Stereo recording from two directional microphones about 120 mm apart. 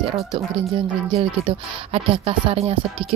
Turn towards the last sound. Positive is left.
turn(degrees=-50)  # may be behind; listen again after turning